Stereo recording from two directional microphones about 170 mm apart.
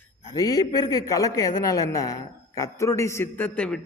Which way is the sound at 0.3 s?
20° left (ahead or behind).